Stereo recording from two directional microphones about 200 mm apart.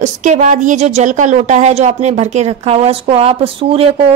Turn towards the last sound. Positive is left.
turn(degrees=-25)  # may be behind; listen again after turning